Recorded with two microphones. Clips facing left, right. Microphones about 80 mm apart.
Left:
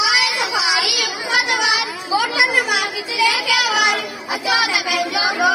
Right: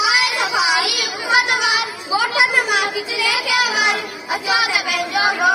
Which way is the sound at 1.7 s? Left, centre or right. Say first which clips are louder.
Even; right.